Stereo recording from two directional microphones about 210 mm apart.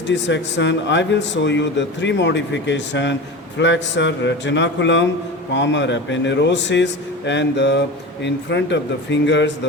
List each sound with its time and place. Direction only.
0.1 s speech: 60° left (ahead or behind)